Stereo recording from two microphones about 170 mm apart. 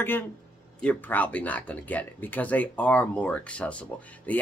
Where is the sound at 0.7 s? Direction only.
10° left (ahead or behind).